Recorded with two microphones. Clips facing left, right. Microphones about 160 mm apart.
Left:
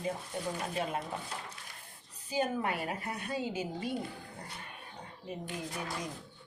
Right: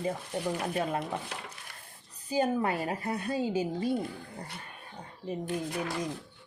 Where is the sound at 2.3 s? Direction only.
35° right (ahead or behind).